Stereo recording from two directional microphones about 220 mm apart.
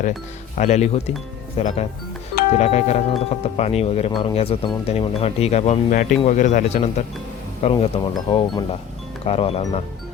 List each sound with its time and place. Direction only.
0.5 s speech: 30° left (ahead or behind)